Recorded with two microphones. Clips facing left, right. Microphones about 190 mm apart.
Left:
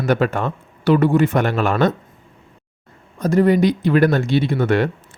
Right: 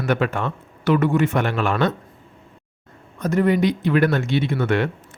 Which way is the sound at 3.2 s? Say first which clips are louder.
Left 4 dB; 35° left (ahead or behind).